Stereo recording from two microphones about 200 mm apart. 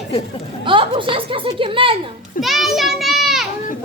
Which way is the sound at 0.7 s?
25° right (ahead or behind).